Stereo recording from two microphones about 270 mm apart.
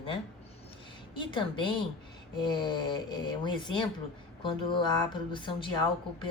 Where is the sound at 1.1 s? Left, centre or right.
Centre.